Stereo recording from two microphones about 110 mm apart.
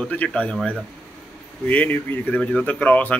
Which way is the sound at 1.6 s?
15° left (ahead or behind).